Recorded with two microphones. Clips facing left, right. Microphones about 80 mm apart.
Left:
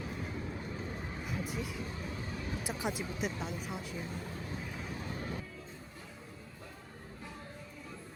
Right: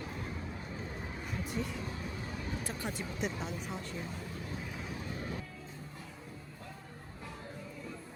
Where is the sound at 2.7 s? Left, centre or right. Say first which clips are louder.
Left 3 dB; centre.